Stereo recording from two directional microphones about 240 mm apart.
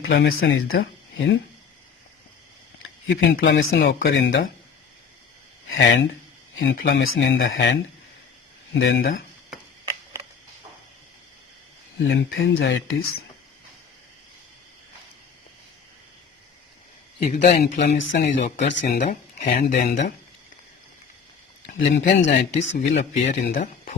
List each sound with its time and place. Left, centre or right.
0.1 s speech: left
3.1 s speech: left
5.7 s speech: left
11.9 s speech: left
17.2 s speech: left
21.7 s speech: left
22.6 s speech: left
23.0 s speech: left